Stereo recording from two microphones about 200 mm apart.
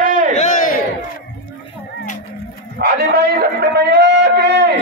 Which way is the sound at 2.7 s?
55° right (ahead or behind).